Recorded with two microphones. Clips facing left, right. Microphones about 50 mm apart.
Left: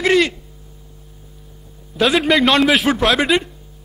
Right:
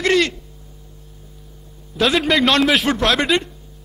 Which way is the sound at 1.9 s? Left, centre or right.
Centre.